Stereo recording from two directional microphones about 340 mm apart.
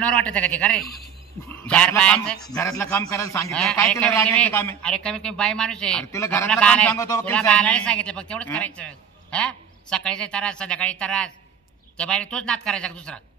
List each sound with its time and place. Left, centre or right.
0.0 s a man's voice: centre